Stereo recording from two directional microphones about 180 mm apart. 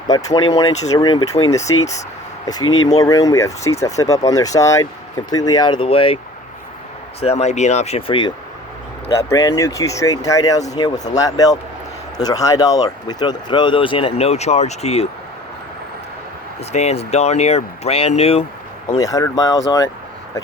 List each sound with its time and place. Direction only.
0.1 s speech: 20° left (ahead or behind)
7.2 s speech: 35° left (ahead or behind)
9.3 s speech: 15° left (ahead or behind); by 15.0 s 35° left (ahead or behind)
16.6 s speech: 35° left (ahead or behind)
18.9 s speech: 20° left (ahead or behind)